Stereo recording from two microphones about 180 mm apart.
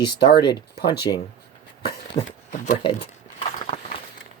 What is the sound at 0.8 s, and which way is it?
Speech, 65° left (ahead or behind).